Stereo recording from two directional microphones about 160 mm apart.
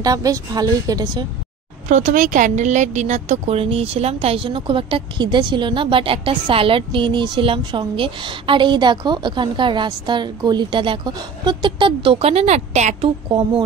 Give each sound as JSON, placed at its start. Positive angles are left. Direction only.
{"t": 0.0, "sound": "a woman's voice", "side_deg": -20}
{"t": 1.9, "sound": "a woman's voice", "side_deg": -50}